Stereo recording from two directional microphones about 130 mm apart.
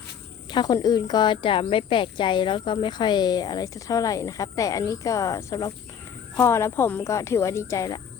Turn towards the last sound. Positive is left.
turn(degrees=25)  # may be behind; listen again after turning